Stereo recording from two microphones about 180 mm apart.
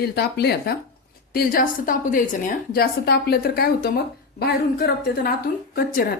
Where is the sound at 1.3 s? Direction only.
50° left (ahead or behind).